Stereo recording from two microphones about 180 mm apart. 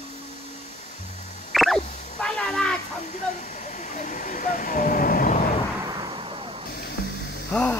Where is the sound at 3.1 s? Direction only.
40° left (ahead or behind).